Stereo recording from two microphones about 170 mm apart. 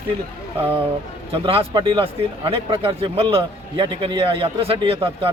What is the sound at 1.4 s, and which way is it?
Speech, 30° right (ahead or behind).